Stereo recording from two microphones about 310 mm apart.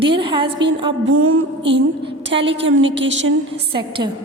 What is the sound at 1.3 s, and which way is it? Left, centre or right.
A woman's voice, right.